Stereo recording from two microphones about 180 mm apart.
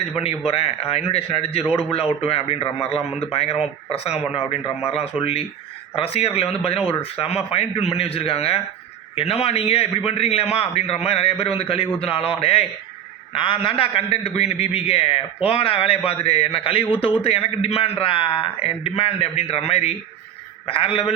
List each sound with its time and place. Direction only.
0.2 s a man's voice: 35° left (ahead or behind)